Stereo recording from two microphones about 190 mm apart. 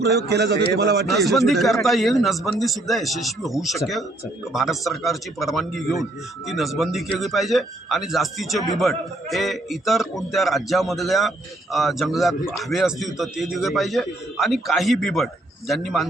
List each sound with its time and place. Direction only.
0.0 s a man's voice: 60° right (ahead or behind)
1.0 s a man's voice: centre (ahead or behind)